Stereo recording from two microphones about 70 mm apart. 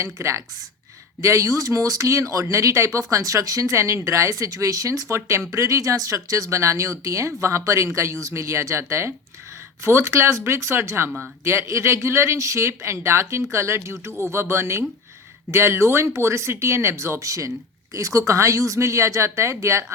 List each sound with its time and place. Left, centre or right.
0.0 s speech: right